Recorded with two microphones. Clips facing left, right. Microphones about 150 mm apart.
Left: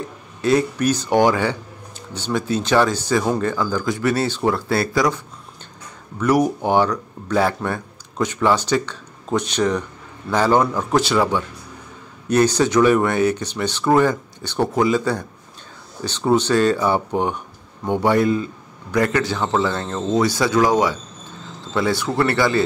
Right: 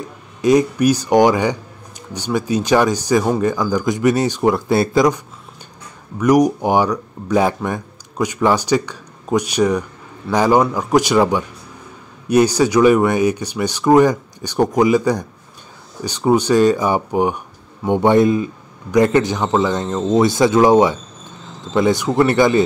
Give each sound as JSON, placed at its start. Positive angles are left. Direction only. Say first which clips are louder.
{"t": 0.4, "sound": "a man's voice", "louder": "right 4 dB", "side_deg": -15}